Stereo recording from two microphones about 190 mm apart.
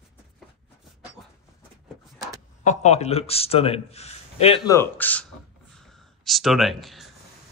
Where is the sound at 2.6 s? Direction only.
40° left (ahead or behind).